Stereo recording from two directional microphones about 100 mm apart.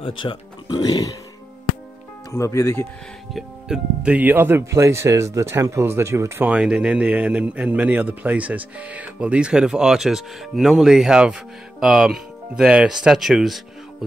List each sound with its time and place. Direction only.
0.0 s speech: 55° left (ahead or behind); by 1.1 s 40° left (ahead or behind)
2.3 s speech: 30° left (ahead or behind)
3.3 s speech: 5° right (ahead or behind); by 6.5 s 25° right (ahead or behind)
6.5 s a man's voice: 10° right (ahead or behind)